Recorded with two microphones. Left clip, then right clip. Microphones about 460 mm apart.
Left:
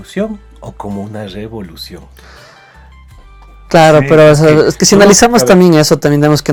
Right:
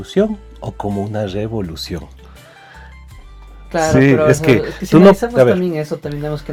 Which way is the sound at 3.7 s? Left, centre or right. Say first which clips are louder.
Left 8 dB; left.